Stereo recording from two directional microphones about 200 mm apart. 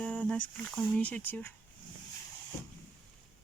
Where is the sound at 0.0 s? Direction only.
5° left (ahead or behind).